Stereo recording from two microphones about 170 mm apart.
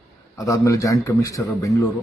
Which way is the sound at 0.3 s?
20° left (ahead or behind).